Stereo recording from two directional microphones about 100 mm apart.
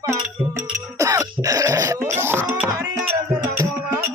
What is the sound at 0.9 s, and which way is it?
Throat clearing, 35° right (ahead or behind).